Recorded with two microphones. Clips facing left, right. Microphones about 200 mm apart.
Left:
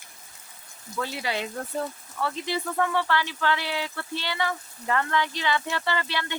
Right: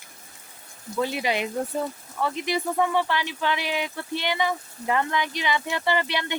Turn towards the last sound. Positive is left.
turn(degrees=-15)  # may be behind; listen again after turning